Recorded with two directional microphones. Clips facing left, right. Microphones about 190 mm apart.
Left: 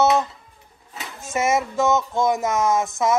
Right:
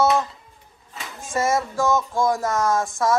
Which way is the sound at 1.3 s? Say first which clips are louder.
Left 1 dB; 20° left (ahead or behind).